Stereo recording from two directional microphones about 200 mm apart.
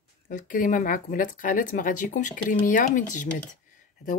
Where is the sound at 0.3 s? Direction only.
40° left (ahead or behind).